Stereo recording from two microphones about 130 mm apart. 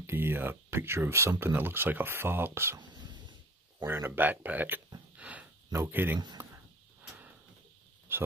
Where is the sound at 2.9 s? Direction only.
35° right (ahead or behind).